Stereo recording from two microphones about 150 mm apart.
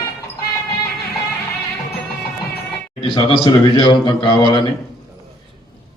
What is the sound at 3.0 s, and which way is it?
A man's voice, 30° left (ahead or behind).